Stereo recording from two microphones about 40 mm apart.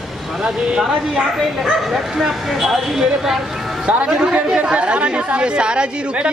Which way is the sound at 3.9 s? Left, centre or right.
Right.